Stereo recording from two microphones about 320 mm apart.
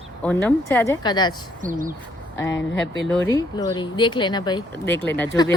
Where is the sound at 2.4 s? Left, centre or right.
Left.